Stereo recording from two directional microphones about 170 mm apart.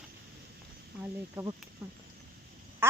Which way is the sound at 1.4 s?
15° right (ahead or behind).